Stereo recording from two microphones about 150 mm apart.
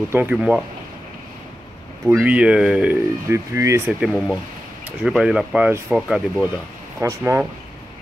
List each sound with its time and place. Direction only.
0.1 s speech: 10° right (ahead or behind)
2.0 s speech: 10° right (ahead or behind)
4.0 s speech: 5° right (ahead or behind)
7.0 s speech: 20° right (ahead or behind)